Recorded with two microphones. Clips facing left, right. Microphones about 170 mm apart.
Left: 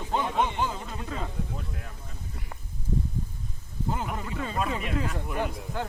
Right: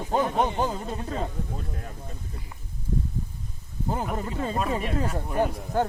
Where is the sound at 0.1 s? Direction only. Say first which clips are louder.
Right 3 dB; 40° right (ahead or behind).